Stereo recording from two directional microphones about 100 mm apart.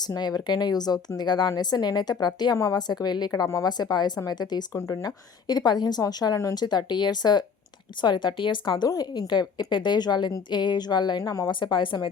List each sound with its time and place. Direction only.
0.0 s a woman's voice: 40° left (ahead or behind)
11.2 s a woman's voice: 40° left (ahead or behind); by 12.0 s 55° left (ahead or behind)